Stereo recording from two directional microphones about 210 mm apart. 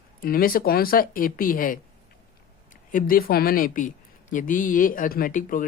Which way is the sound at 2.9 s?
40° left (ahead or behind).